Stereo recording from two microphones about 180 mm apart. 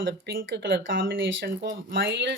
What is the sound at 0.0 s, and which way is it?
Speech, 75° right (ahead or behind).